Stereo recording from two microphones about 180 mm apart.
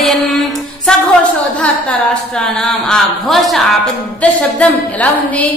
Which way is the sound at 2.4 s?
5° left (ahead or behind).